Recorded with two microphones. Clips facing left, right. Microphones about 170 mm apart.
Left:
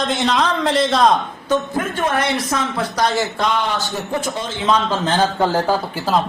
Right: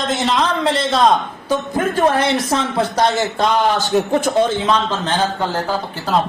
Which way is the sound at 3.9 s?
70° right (ahead or behind).